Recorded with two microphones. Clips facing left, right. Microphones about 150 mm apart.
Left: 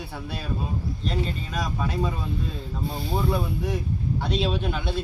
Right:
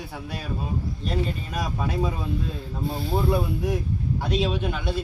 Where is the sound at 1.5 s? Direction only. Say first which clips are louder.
Even; 10° right (ahead or behind).